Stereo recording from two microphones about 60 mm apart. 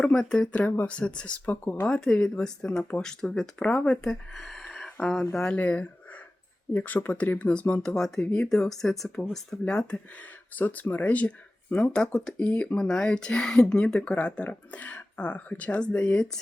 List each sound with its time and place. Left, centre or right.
0.0 s speech: centre
1.5 s speech: left
1.9 s speech: centre
5.3 s speech: centre
7.8 s speech: centre
10.5 s speech: left